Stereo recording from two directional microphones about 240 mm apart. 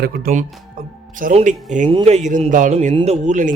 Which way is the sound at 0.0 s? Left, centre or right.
Right.